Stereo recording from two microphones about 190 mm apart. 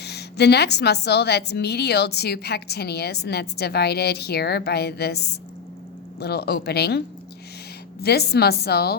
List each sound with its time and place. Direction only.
0.0 s a woman's voice: 60° left (ahead or behind)
8.0 s a woman's voice: 55° left (ahead or behind)